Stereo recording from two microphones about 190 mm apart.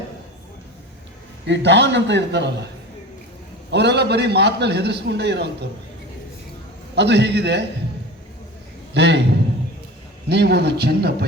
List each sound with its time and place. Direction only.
1.5 s a man's voice: 65° right (ahead or behind)
3.7 s a man's voice: 60° right (ahead or behind)
6.9 s a man's voice: 65° right (ahead or behind)
8.9 s a man's voice: 65° right (ahead or behind)
10.2 s a man's voice: 60° right (ahead or behind)